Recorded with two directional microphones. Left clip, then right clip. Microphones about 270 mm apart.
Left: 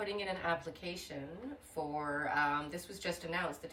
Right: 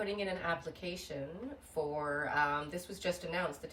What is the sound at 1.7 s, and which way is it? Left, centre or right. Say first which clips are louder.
Speech: right 2 dB; centre.